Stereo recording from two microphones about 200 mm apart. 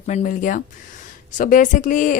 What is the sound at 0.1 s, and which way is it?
A woman's voice, 40° left (ahead or behind).